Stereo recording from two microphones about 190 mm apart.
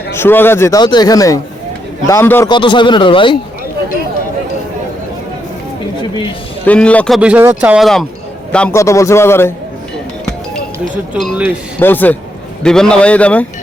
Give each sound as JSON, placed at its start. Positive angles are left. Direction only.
{"t": 0.1, "sound": "speech", "side_deg": 10}
{"t": 2.5, "sound": "speech", "side_deg": 25}
{"t": 6.0, "sound": "a sound", "side_deg": 25}
{"t": 6.7, "sound": "speech", "side_deg": 5}
{"t": 7.2, "sound": "speech", "side_deg": -10}
{"t": 8.5, "sound": "speech", "side_deg": 10}
{"t": 11.1, "sound": "speech", "side_deg": -5}
{"t": 11.8, "sound": "speech", "side_deg": 10}